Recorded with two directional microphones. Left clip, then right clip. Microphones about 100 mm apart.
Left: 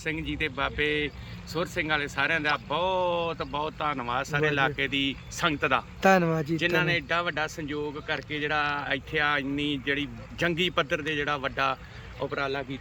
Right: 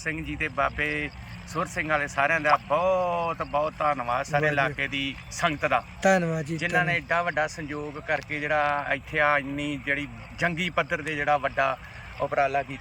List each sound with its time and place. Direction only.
0.1 s speech: 25° left (ahead or behind)
6.0 s speech: 5° left (ahead or behind)
6.8 s speech: 20° left (ahead or behind)
8.0 s speech: 20° left (ahead or behind)
12.3 s speech: 5° left (ahead or behind)